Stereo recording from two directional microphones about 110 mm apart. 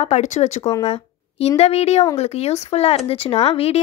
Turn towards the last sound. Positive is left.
turn(degrees=65)  # may be behind; listen again after turning